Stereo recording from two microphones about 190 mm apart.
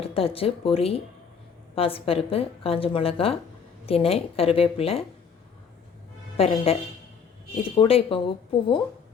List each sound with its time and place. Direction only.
0.0 s a woman's voice: 30° left (ahead or behind)
6.3 s a woman's voice: 30° left (ahead or behind)